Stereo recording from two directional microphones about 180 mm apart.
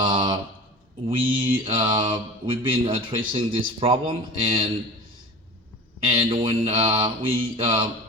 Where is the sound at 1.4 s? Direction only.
30° right (ahead or behind).